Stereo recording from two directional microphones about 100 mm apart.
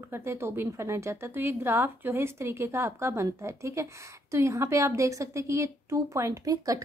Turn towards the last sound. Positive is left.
turn(degrees=-35)  # may be behind; listen again after turning